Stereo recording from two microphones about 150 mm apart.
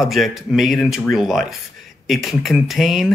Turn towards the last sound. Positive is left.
turn(degrees=0)  # may be behind; listen again after turning